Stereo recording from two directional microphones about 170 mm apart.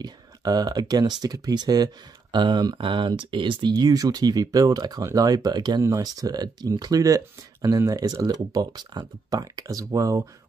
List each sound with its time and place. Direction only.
0.0 s speech: 25° right (ahead or behind)